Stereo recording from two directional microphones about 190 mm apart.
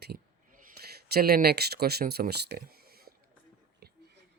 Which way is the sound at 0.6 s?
55° right (ahead or behind).